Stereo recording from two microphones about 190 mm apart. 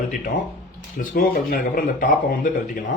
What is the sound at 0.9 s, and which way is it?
Speech, 45° left (ahead or behind).